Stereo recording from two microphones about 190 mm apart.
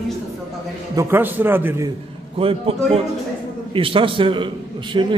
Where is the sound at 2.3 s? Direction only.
30° right (ahead or behind).